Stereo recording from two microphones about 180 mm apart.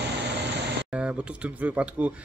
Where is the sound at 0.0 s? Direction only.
70° right (ahead or behind).